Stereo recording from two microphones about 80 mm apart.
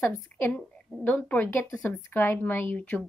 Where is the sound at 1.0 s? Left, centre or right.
Centre.